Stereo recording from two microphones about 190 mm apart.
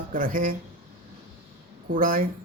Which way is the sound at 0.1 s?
45° right (ahead or behind).